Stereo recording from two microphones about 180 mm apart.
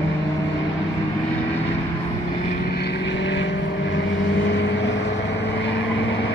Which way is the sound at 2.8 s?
80° left.